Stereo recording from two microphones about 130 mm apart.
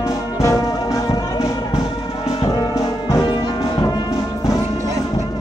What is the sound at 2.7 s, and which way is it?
Music, 25° left (ahead or behind).